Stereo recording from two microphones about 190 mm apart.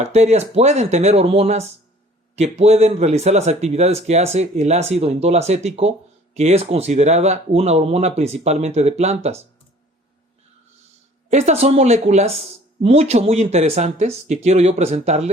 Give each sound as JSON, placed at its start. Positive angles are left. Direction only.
{"t": 0.0, "sound": "speech", "side_deg": -35}
{"t": 11.3, "sound": "speech", "side_deg": -35}